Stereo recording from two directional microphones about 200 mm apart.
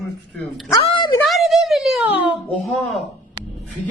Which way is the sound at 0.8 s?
25° left (ahead or behind).